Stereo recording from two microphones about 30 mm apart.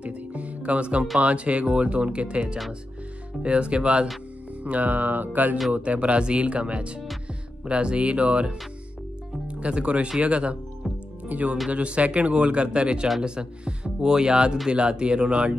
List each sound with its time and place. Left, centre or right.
0.0 s music: right
1.2 s speech: right
3.4 s speech: right
4.6 s speech: right
5.7 s speech: right
11.3 s speech: right
11.7 s speech: right